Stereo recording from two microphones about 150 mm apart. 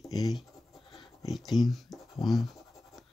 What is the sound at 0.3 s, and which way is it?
Scratch, centre (ahead or behind).